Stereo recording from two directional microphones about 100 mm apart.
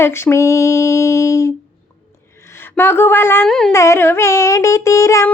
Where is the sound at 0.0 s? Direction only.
25° left (ahead or behind).